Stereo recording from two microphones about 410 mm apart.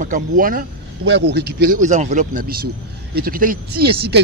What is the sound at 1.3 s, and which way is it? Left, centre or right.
Speech, right.